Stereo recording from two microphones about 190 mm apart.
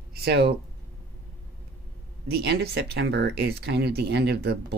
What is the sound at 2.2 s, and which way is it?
Speech, 60° right (ahead or behind).